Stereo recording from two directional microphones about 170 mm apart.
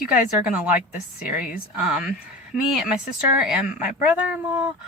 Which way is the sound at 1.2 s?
50° left (ahead or behind).